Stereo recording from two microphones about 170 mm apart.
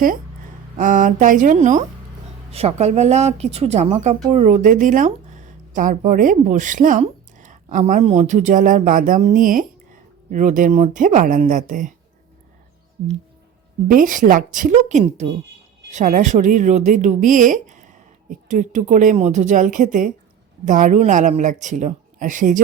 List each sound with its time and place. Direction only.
0.8 s speech: 50° right (ahead or behind)
2.5 s speech: 35° right (ahead or behind)
13.8 s speech: 55° right (ahead or behind)